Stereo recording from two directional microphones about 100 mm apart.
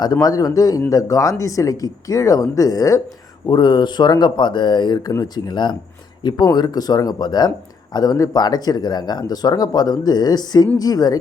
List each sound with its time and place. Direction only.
0.0 s speech: 40° left (ahead or behind)
3.5 s speech: 45° left (ahead or behind)